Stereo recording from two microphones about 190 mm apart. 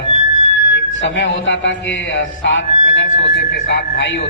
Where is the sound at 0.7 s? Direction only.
70° left (ahead or behind).